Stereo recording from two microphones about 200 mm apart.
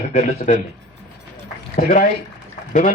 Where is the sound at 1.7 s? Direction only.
40° left (ahead or behind).